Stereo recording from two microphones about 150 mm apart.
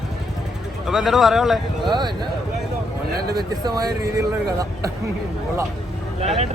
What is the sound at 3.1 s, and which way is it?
Speech, 90° right.